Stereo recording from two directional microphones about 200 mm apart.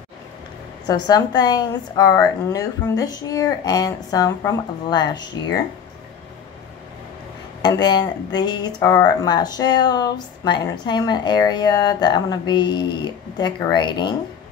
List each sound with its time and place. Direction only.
0.8 s speech: 20° left (ahead or behind)
7.6 s speech: 20° left (ahead or behind)